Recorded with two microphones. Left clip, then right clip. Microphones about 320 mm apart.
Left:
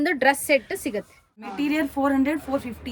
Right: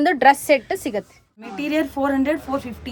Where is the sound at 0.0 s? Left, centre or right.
Centre.